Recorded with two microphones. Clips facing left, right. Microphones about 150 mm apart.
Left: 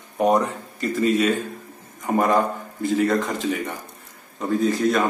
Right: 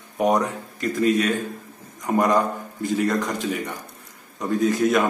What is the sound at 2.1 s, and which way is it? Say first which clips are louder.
A man's voice: even; centre (ahead or behind).